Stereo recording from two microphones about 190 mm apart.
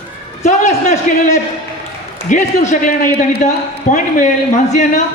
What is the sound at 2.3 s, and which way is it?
Speech, 40° left (ahead or behind).